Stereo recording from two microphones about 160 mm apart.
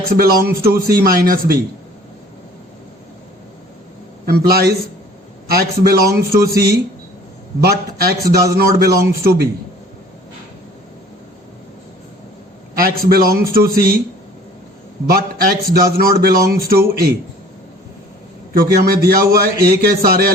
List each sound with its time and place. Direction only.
0.1 s a man's voice: 70° right (ahead or behind)
4.3 s a man's voice: 70° right (ahead or behind)
5.5 s a man's voice: 70° right (ahead or behind)
12.7 s a man's voice: 65° right (ahead or behind)
15.1 s a man's voice: 70° right (ahead or behind)
18.5 s a man's voice: 65° right (ahead or behind)